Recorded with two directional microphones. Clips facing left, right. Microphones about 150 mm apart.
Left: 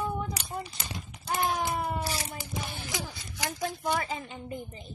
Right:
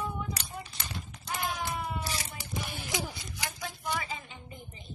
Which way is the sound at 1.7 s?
40° left (ahead or behind).